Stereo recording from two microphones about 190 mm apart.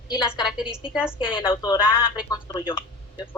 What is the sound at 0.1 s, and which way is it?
Speech, 5° right (ahead or behind).